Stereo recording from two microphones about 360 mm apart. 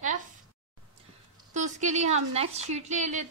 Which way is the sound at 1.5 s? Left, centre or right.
Centre.